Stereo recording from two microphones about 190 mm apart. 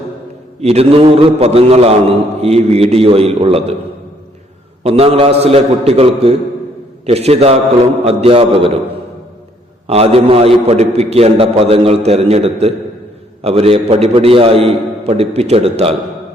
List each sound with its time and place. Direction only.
0.6 s a man's voice: 35° right (ahead or behind)
4.8 s a man's voice: 30° right (ahead or behind)
9.8 s a man's voice: 30° right (ahead or behind)